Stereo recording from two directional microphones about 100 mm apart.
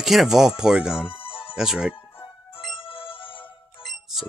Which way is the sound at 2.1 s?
65° left (ahead or behind).